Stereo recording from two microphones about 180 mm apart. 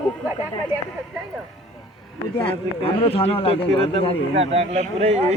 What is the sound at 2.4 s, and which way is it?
A man's voice, 30° left (ahead or behind).